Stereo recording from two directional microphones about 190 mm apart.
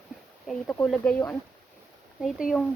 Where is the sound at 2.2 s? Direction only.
Centre (ahead or behind).